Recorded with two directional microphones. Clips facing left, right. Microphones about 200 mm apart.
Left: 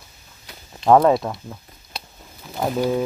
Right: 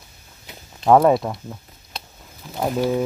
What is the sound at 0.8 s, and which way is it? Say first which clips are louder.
Speech: even; centre (ahead or behind).